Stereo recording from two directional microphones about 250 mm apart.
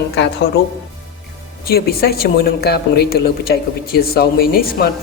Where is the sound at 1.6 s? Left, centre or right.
Left.